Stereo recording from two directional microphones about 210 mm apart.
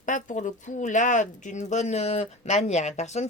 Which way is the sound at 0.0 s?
35° left (ahead or behind).